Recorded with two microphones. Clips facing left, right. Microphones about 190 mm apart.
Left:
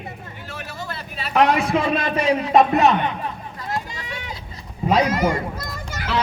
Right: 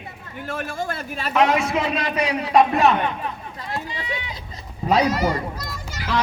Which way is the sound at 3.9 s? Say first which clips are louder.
Right 3 dB; 45° left (ahead or behind).